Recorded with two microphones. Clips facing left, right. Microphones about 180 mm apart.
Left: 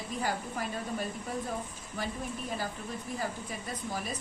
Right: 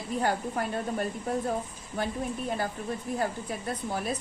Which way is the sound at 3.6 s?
55° right (ahead or behind).